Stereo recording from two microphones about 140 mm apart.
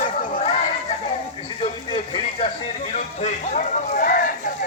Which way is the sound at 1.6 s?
40° left (ahead or behind).